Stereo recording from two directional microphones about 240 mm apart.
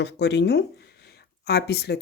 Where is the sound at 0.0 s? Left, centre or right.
Left.